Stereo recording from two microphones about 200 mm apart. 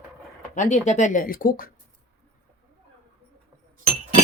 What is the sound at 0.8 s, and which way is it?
Speech, 35° left (ahead or behind).